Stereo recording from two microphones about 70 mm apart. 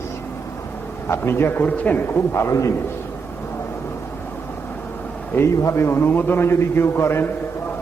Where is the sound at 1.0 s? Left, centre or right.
Left.